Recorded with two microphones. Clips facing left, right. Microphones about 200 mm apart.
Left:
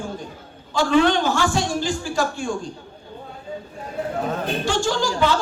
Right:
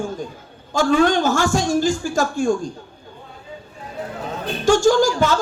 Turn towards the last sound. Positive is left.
turn(degrees=-45)  # may be behind; listen again after turning